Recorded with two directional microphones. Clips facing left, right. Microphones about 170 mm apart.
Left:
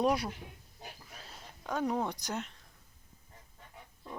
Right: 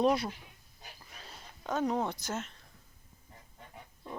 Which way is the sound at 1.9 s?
10° left (ahead or behind).